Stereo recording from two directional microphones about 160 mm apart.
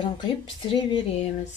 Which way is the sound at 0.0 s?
30° left (ahead or behind).